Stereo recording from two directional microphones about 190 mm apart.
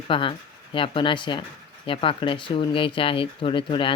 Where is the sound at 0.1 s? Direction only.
25° left (ahead or behind).